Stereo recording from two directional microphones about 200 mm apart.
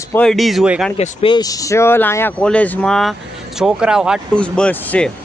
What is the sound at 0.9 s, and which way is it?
Speech, 30° left (ahead or behind).